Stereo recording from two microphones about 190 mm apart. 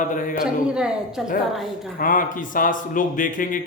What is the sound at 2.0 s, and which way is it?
A man's voice, 45° left (ahead or behind).